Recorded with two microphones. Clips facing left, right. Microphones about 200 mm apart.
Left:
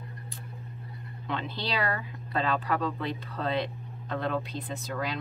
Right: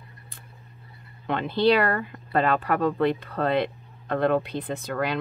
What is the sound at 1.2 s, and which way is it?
Speech, 55° right (ahead or behind).